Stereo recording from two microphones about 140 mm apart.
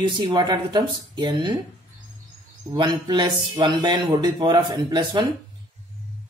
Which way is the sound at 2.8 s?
30° right (ahead or behind).